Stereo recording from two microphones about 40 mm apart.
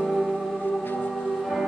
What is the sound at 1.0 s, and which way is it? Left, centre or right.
Music, centre.